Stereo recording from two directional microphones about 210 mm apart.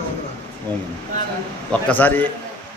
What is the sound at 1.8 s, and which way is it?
Speech, 10° left (ahead or behind).